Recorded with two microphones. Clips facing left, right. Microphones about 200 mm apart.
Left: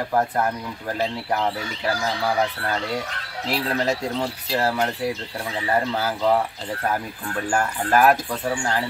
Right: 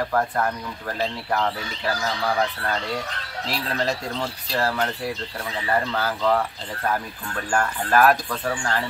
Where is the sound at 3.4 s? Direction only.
15° left (ahead or behind).